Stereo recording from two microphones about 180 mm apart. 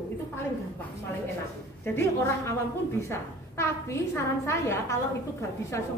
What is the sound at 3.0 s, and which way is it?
A woman's voice, 15° left (ahead or behind).